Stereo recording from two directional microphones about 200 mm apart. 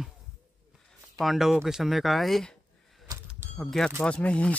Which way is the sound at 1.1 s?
Centre (ahead or behind).